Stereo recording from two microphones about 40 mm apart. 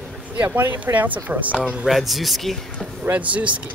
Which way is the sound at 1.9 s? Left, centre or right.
Centre.